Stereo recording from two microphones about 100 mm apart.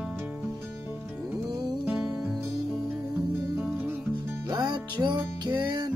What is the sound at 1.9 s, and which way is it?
Music, 10° right (ahead or behind).